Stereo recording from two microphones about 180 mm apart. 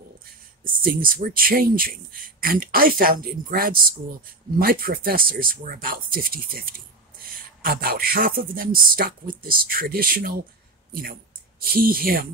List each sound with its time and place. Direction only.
0.7 s speech: 55° right (ahead or behind)